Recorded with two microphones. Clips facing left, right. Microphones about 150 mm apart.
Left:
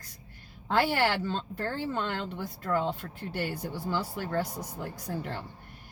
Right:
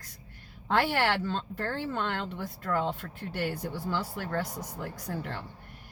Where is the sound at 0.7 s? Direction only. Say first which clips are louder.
Even; 35° left (ahead or behind).